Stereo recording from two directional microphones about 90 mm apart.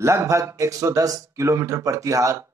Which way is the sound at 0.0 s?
35° right (ahead or behind).